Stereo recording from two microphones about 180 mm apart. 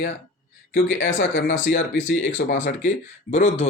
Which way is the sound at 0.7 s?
80° left.